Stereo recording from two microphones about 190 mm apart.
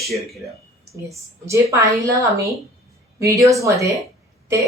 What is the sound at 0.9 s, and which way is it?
A woman's voice, 15° right (ahead or behind).